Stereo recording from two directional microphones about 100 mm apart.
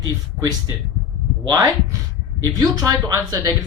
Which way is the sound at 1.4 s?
35° right (ahead or behind).